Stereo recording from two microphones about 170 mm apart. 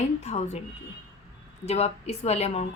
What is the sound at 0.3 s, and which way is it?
Speech, 40° left (ahead or behind).